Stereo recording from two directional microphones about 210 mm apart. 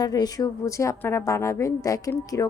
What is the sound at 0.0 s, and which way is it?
Speech, 20° left (ahead or behind).